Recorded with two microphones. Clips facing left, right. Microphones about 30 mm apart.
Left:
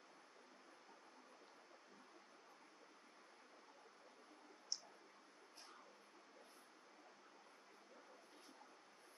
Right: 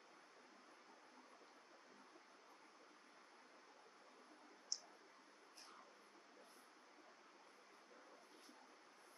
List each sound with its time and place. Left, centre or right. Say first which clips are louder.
4.7 s clicking: left 1 dB; centre